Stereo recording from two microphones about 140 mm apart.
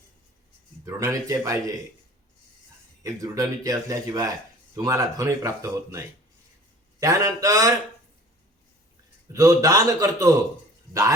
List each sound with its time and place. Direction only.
0.9 s speech: 25° right (ahead or behind)
3.0 s speech: 25° right (ahead or behind)
9.3 s speech: 25° right (ahead or behind)